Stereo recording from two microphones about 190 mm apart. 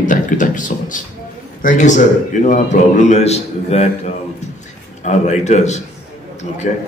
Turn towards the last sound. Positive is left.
turn(degrees=40)  # may be behind; listen again after turning